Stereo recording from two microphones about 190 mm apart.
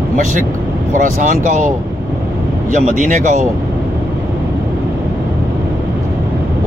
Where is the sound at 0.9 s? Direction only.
40° right (ahead or behind).